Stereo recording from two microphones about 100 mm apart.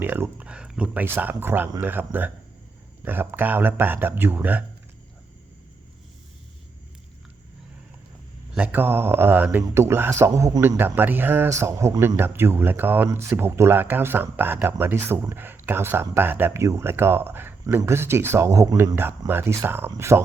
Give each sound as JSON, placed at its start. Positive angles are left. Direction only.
{"t": 0.0, "sound": "a sound", "side_deg": -20}
{"t": 1.0, "sound": "speech", "side_deg": -20}
{"t": 8.5, "sound": "speech", "side_deg": -15}
{"t": 11.4, "sound": "speech", "side_deg": -30}